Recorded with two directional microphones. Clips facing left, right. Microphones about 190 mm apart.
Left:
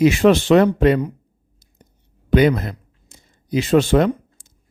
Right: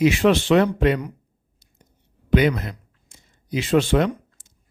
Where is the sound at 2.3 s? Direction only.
40° left (ahead or behind).